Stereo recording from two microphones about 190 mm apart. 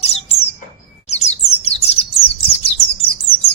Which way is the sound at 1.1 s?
35° left (ahead or behind).